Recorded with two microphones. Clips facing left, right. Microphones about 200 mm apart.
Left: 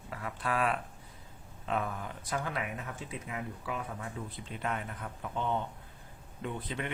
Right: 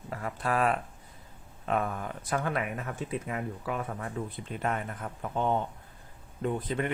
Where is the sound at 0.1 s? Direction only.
45° right (ahead or behind).